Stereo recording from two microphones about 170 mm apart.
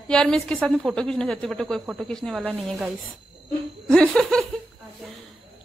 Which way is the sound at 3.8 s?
5° left (ahead or behind).